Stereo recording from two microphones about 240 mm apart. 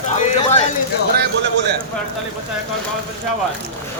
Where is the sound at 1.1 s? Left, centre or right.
Right.